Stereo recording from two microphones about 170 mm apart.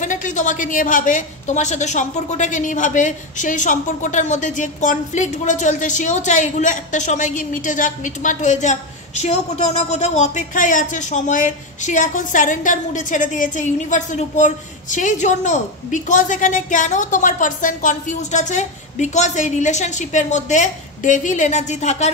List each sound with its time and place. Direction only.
0.0 s a woman's voice: 50° left (ahead or behind)